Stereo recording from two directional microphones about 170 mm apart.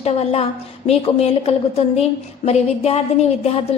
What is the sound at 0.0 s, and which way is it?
A woman's voice, 35° left (ahead or behind).